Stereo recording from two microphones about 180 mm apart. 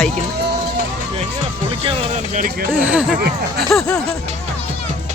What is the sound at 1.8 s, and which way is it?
Speech, 30° right (ahead or behind).